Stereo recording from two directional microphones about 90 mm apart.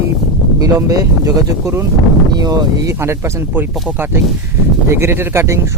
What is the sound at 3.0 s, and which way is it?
Speech, 30° right (ahead or behind).